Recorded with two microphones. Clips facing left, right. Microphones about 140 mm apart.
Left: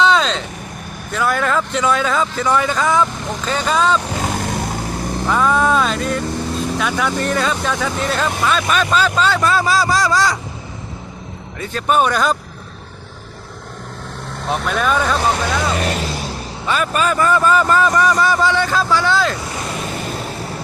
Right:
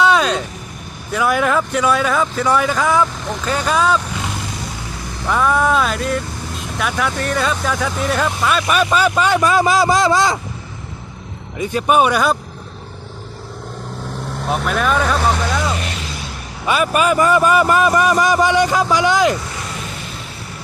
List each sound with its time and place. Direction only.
0.0 s vehicle: 10° right (ahead or behind)
1.1 s speech: 10° right (ahead or behind)
4.1 s vehicle: 45° left (ahead or behind)
5.3 s speech: 5° right (ahead or behind); by 10.3 s 20° right (ahead or behind)
11.5 s speech: 15° right (ahead or behind)
14.4 s speech: 5° right (ahead or behind)
15.8 s vehicle: 40° left (ahead or behind)
16.6 s speech: 10° right (ahead or behind)
20.1 s vehicle: 45° left (ahead or behind)